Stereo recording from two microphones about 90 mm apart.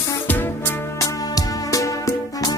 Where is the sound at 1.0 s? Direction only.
40° left (ahead or behind).